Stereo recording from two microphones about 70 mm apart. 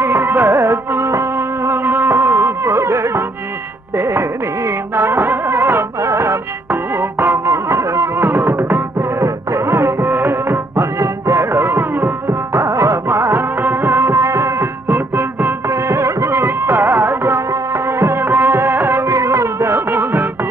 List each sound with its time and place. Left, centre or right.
0.0 s music: right
13.6 s music: right